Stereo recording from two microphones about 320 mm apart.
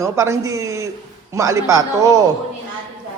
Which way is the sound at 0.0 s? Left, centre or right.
Centre.